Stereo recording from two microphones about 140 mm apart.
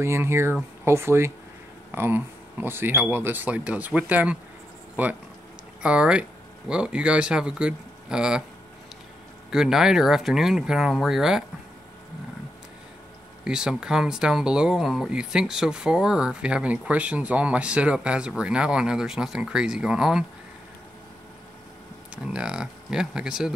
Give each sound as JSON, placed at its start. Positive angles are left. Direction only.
{"t": 0.0, "sound": "speech", "side_deg": -20}
{"t": 9.5, "sound": "speech", "side_deg": -5}
{"t": 13.4, "sound": "speech", "side_deg": -5}
{"t": 22.1, "sound": "speech", "side_deg": -5}